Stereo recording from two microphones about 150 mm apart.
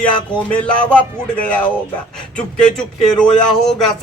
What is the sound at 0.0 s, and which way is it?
Speech, 10° left (ahead or behind).